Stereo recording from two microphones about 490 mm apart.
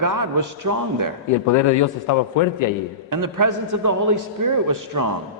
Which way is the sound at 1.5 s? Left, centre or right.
Left.